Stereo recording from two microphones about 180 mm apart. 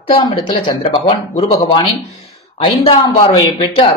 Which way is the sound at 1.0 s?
35° left (ahead or behind).